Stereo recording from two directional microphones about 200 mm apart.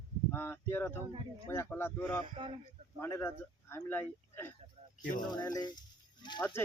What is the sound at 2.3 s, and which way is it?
Speech, 25° right (ahead or behind).